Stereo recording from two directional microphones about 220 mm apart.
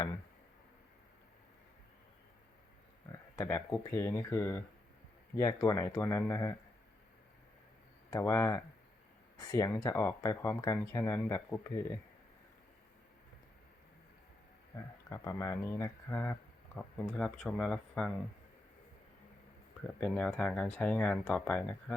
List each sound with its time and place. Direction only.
3.3 s speech: 15° left (ahead or behind)
8.1 s speech: 15° left (ahead or behind)
15.1 s speech: 15° left (ahead or behind)
20.0 s speech: 5° left (ahead or behind)